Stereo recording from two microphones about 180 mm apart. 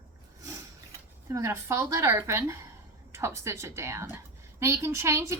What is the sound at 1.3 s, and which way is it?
A woman's voice, 15° right (ahead or behind).